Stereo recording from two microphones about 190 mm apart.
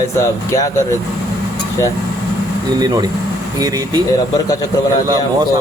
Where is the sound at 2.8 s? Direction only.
20° right (ahead or behind).